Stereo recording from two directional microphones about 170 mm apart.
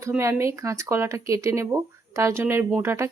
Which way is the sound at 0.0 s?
15° right (ahead or behind).